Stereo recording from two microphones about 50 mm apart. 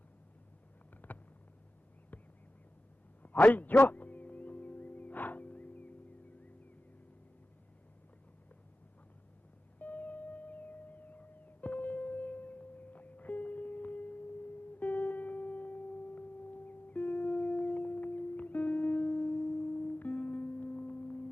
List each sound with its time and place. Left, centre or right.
1.0 s a sound: left
3.2 s music: left
9.7 s music: left